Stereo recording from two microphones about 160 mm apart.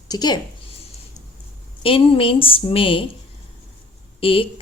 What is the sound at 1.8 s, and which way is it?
Speech, 35° left (ahead or behind).